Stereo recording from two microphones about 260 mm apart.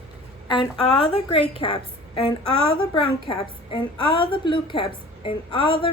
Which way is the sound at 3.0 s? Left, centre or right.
Centre.